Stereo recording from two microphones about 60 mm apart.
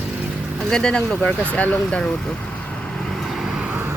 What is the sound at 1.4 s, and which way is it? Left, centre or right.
Speech, left.